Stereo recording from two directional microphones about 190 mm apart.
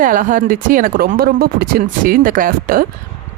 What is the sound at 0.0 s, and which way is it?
Speech, 45° right (ahead or behind).